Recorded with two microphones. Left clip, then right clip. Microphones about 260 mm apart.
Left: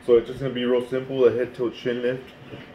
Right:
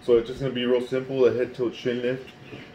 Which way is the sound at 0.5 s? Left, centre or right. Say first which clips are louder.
Left 1 dB; centre.